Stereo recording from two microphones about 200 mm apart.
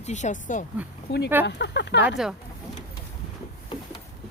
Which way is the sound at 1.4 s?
60° left (ahead or behind).